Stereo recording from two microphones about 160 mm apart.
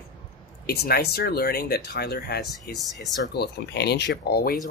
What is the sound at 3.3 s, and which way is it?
Speech, 90° left.